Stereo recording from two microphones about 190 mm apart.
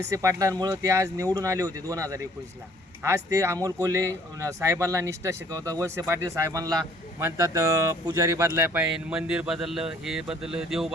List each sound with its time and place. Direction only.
0.1 s speech: 15° right (ahead or behind); by 10.9 s centre (ahead or behind)